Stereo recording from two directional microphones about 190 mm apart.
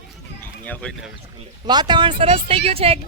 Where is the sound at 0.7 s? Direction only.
5° left (ahead or behind).